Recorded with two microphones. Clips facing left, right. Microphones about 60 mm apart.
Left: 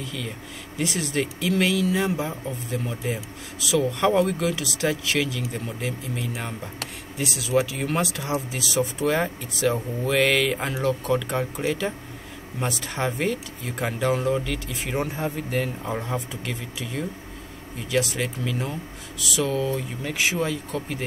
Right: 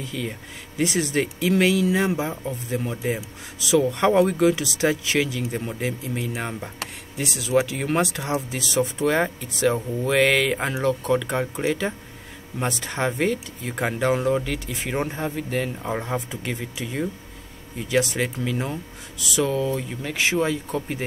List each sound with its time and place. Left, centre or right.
0.0 s speech: centre
0.7 s speech: centre
15.9 s speech: centre
17.8 s speech: centre
20.0 s speech: centre